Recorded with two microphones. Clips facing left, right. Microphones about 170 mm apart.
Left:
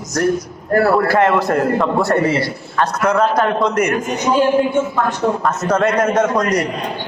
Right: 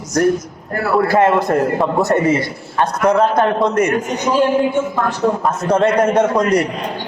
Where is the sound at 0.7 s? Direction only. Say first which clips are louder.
Left 3 dB; 40° left (ahead or behind).